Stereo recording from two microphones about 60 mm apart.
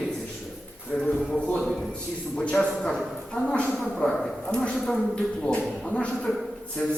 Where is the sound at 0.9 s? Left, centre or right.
Centre.